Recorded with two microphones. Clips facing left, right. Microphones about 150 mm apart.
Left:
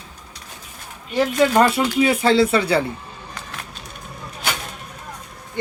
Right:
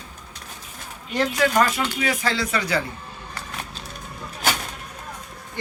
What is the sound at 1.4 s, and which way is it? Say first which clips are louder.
Speech: left 5 dB; 30° left (ahead or behind).